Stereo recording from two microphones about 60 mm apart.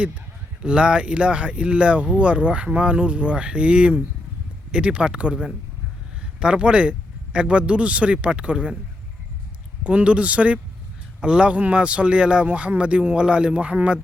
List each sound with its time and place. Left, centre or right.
0.6 s speech: centre
9.8 s speech: centre